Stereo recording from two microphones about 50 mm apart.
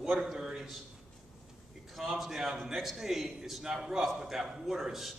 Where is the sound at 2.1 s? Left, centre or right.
Centre.